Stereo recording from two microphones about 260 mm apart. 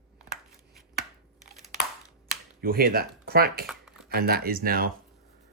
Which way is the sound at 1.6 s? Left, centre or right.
Centre.